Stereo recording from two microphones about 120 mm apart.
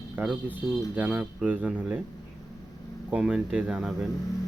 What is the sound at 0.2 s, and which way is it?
Speech, 15° right (ahead or behind).